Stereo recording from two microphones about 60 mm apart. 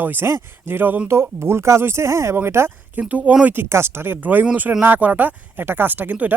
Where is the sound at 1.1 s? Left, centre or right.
Right.